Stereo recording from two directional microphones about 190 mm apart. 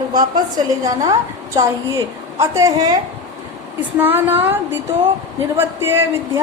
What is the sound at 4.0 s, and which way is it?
A woman's voice, 10° right (ahead or behind).